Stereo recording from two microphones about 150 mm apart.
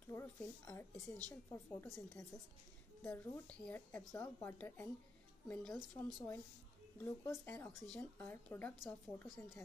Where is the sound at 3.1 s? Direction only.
10° left (ahead or behind).